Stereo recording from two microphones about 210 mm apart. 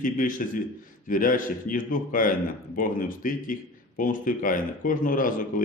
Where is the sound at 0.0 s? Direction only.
40° left (ahead or behind).